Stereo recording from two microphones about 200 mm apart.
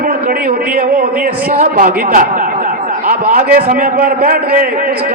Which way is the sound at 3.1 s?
45° right (ahead or behind).